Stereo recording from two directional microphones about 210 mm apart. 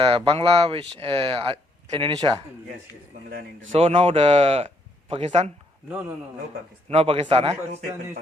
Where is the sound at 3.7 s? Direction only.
25° right (ahead or behind).